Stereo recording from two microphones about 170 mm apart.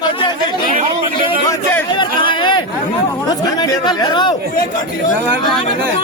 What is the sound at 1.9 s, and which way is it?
A man's voice, 30° left (ahead or behind).